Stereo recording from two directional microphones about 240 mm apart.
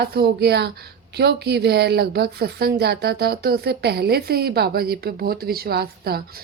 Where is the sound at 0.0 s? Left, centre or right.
Right.